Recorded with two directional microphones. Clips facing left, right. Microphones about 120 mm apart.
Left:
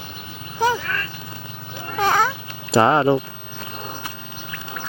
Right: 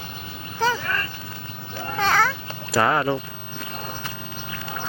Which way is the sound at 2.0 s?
15° left (ahead or behind).